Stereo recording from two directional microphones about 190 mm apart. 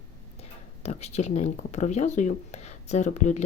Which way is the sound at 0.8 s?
35° left (ahead or behind).